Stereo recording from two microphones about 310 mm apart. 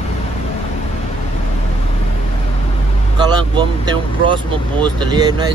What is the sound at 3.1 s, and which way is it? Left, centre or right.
Speech, centre.